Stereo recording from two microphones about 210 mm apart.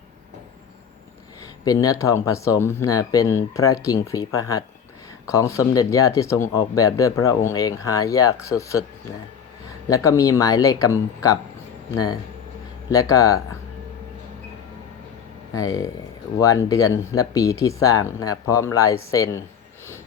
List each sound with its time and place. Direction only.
1.6 s speech: 15° left (ahead or behind)
9.9 s speech: 15° left (ahead or behind)
12.9 s speech: 15° left (ahead or behind)
15.5 s speech: 15° left (ahead or behind)